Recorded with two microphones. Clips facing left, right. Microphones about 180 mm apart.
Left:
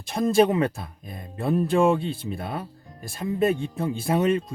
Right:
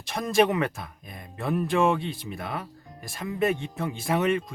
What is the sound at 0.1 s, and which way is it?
Speech, 30° left (ahead or behind).